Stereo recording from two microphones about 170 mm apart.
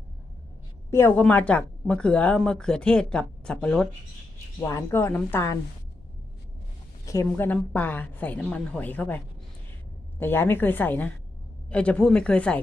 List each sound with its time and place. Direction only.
0.8 s speech: 15° left (ahead or behind)
4.6 s a woman's voice: 15° left (ahead or behind)
7.1 s a woman's voice: 15° left (ahead or behind)